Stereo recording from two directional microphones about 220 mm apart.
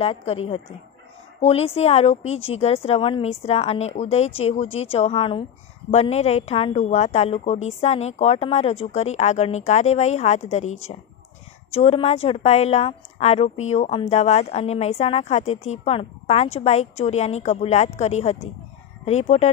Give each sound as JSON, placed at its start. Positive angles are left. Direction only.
{"t": 0.0, "sound": "a woman's voice", "side_deg": 25}